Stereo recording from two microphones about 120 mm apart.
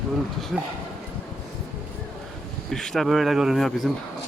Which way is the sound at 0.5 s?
5° right (ahead or behind).